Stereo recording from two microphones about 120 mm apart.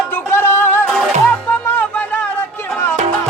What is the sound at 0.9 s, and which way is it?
Music, 5° left (ahead or behind).